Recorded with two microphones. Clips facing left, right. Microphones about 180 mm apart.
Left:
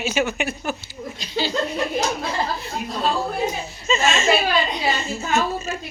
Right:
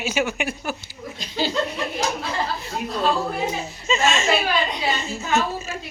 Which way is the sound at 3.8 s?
15° right (ahead or behind).